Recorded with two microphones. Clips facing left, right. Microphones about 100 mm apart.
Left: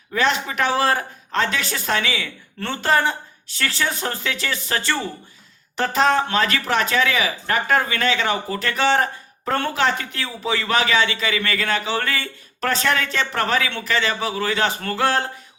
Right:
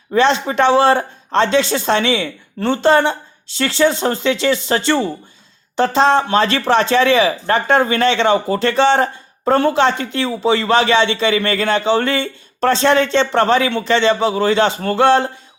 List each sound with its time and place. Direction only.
0.1 s speech: 30° right (ahead or behind)